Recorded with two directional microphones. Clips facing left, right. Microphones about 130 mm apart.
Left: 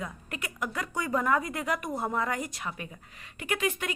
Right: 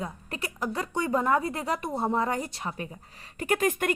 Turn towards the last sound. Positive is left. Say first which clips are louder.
# right 5 dB
turn(degrees=-50)  # may be behind; listen again after turning